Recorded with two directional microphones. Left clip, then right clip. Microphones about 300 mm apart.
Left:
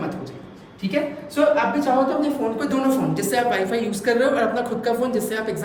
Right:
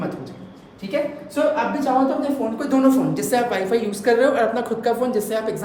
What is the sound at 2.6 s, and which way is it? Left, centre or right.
A woman's voice, centre.